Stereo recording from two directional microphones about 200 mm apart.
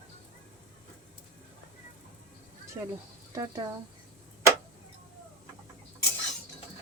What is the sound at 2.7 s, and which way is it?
Speech, 15° right (ahead or behind).